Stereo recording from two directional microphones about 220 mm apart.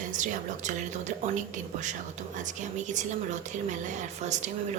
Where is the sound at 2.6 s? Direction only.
35° right (ahead or behind).